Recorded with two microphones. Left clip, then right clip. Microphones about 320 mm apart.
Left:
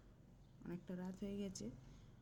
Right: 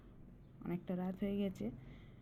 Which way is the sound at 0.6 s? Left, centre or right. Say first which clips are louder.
Right 8 dB; centre.